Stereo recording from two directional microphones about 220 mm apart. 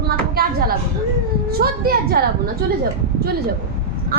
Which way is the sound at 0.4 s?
45° right (ahead or behind).